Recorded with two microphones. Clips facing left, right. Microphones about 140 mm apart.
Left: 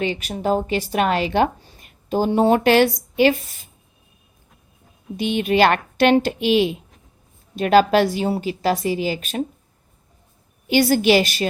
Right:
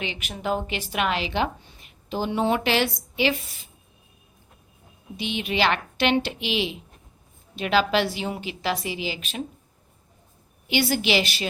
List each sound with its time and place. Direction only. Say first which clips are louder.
0.0 s a woman's voice: left 7 dB; 40° left (ahead or behind)
5.1 s a woman's voice: left 8 dB; 50° left (ahead or behind)
10.7 s a woman's voice: left 8 dB; 45° left (ahead or behind)